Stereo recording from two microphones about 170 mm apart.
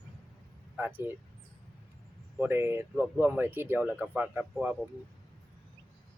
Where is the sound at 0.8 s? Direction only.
10° right (ahead or behind).